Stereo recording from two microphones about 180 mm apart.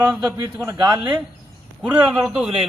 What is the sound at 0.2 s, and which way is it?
Speech, 20° right (ahead or behind).